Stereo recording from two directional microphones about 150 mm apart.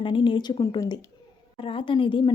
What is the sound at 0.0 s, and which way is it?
Speech, 35° left (ahead or behind).